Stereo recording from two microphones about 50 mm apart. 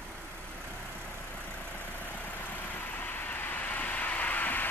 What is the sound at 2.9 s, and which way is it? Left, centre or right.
Vehicle, left.